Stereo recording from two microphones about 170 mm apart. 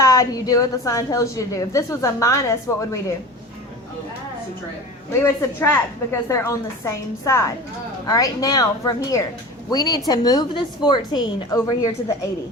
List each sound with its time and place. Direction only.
0.0 s a woman's voice: 20° left (ahead or behind)
5.2 s a woman's voice: 15° left (ahead or behind)